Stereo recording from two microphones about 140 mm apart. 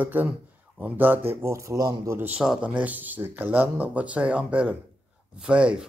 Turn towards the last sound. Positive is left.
turn(degrees=-5)  # may be behind; listen again after turning